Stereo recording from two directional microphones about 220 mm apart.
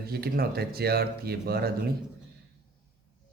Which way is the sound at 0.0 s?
45° right (ahead or behind).